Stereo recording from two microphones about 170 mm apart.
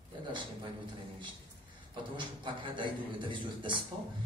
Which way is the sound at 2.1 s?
30° right (ahead or behind).